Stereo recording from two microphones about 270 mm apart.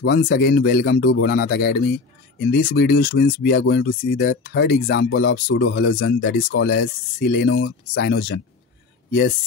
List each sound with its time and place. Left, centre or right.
0.0 s speech: left